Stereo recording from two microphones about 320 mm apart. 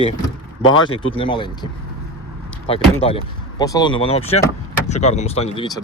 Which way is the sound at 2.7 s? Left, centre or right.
Centre.